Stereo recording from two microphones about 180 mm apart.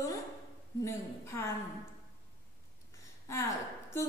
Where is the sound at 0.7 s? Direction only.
15° left (ahead or behind).